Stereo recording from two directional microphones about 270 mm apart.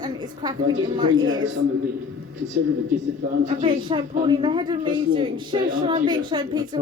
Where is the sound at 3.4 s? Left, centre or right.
Centre.